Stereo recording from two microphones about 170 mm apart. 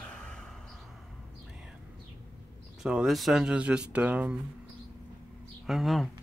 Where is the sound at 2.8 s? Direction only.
5° right (ahead or behind).